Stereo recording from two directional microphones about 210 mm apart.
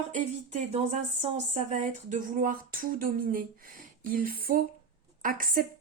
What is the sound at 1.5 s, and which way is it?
Speech, 35° right (ahead or behind).